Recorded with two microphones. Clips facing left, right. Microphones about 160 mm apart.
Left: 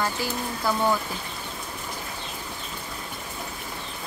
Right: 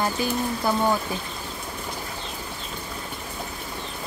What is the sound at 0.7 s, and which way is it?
Speech, 20° right (ahead or behind).